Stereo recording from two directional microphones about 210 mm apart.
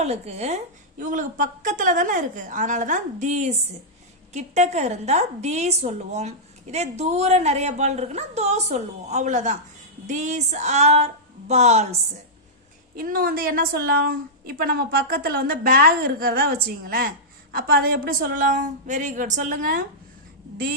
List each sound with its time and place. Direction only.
0.0 s a woman's voice: 30° right (ahead or behind)
13.0 s a woman's voice: 45° right (ahead or behind)